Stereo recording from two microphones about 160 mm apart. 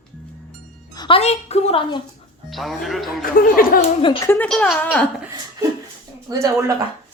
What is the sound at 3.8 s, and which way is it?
Speech, 30° left (ahead or behind).